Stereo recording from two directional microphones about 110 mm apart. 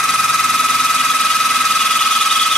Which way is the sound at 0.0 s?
5° left (ahead or behind).